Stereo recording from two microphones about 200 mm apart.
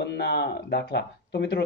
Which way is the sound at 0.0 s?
55° left (ahead or behind).